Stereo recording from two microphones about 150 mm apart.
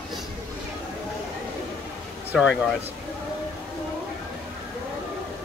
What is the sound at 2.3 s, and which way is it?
Speech, centre (ahead or behind).